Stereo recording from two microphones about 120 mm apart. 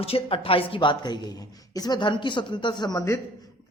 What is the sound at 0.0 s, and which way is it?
A woman's voice, 55° left (ahead or behind).